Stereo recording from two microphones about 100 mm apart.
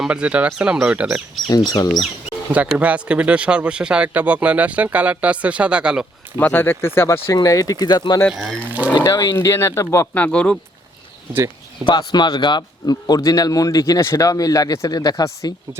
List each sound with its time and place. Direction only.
0.0 s speech: 10° right (ahead or behind)
1.5 s a man's voice: 40° left (ahead or behind)
2.5 s speech: 15° right (ahead or behind)
6.3 s speech: 20° left (ahead or behind)
7.3 s a man's voice: 35° left (ahead or behind)
8.7 s a sound: 15° right (ahead or behind)
9.0 s speech: 40° left (ahead or behind)
10.2 s speech: 10° left (ahead or behind)
11.9 s a man's voice: 50° left (ahead or behind); by 15.5 s 30° left (ahead or behind)